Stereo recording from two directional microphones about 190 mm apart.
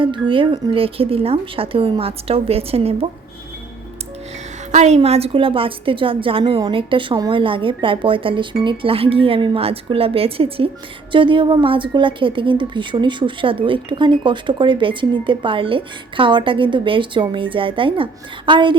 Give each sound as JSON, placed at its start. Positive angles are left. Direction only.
{"t": 0.0, "sound": "a woman's voice", "side_deg": -25}
{"t": 4.7, "sound": "a woman's voice", "side_deg": -35}